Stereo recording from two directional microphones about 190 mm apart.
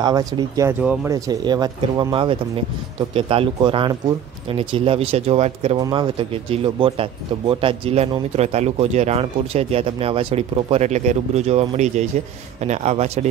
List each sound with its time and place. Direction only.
0.0 s speech: 20° right (ahead or behind)